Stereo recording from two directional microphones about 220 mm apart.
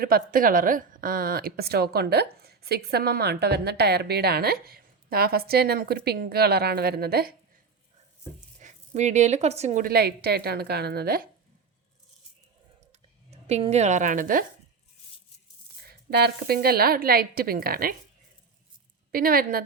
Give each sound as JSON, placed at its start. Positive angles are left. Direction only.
{"t": 0.0, "sound": "a woman's voice", "side_deg": -40}
{"t": 8.5, "sound": "speech", "side_deg": -30}
{"t": 13.5, "sound": "speech", "side_deg": -30}
{"t": 15.8, "sound": "a woman's voice", "side_deg": -45}
{"t": 19.1, "sound": "speech", "side_deg": -40}